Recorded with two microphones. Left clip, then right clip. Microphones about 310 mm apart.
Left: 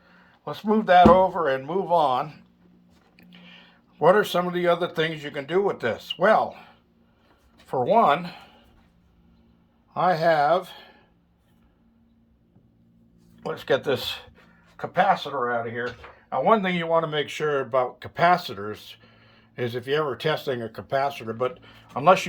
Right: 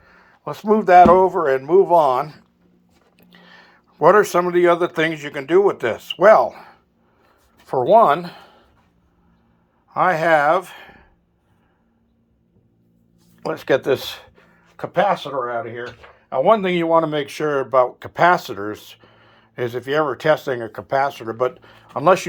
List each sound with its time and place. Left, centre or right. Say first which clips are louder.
0.5 s speech: right 6 dB; right
3.4 s a sound: right 4 dB; right
5.5 s speech: right 8 dB; centre
7.7 s speech: right 6 dB; centre
9.9 s speech: right 5 dB; centre
13.5 s speech: right 5 dB; right